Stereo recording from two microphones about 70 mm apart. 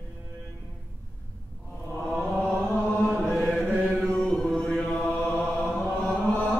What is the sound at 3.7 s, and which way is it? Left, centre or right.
Chant, right.